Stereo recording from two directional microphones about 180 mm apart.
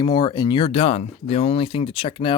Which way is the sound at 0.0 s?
25° left (ahead or behind).